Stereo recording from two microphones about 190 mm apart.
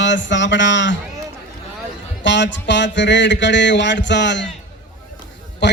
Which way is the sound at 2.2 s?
70° left (ahead or behind).